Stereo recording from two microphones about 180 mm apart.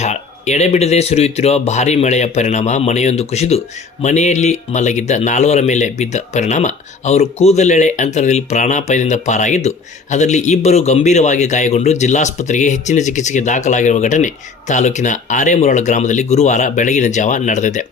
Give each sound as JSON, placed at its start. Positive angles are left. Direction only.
{"t": 0.0, "sound": "speech", "side_deg": 40}